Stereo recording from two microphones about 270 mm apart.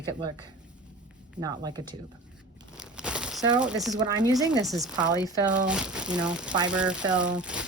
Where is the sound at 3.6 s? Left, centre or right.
Centre.